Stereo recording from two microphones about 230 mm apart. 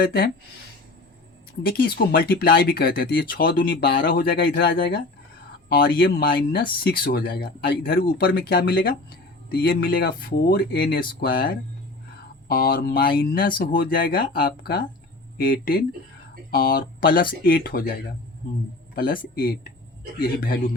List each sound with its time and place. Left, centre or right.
0.0 s speech: left
1.6 s speech: left
18.9 s speech: left